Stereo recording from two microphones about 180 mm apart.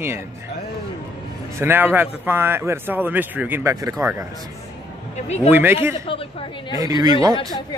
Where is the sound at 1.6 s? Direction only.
10° right (ahead or behind).